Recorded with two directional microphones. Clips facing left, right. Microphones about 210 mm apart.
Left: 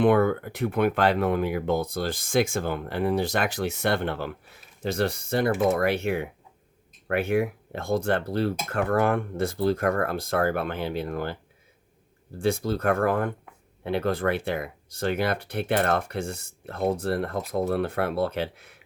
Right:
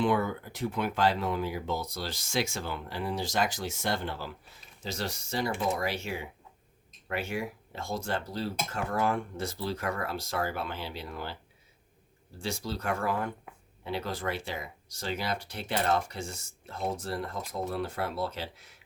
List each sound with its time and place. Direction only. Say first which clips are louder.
0.0 s speech: left 8 dB; 60° left (ahead or behind)
12.4 s speech: left 10 dB; 55° left (ahead or behind)